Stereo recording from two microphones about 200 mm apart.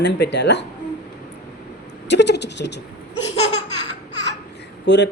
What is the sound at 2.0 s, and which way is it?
Speech, 60° left (ahead or behind).